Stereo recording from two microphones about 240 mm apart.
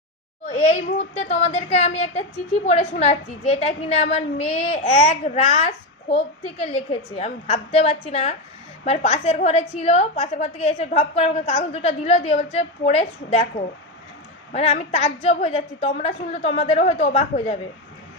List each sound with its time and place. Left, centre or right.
0.4 s a woman's voice: left
14.5 s a woman's voice: left